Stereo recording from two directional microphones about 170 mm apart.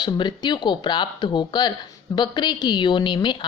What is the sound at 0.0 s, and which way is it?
A woman's voice, 25° left (ahead or behind).